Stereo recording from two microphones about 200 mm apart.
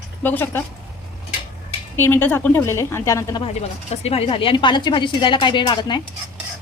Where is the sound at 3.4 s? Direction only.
30° left (ahead or behind).